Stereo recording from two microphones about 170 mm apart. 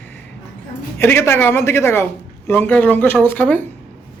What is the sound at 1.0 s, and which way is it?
Speech, 15° left (ahead or behind).